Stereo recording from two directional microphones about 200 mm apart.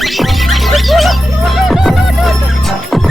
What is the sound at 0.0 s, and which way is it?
Music, centre (ahead or behind).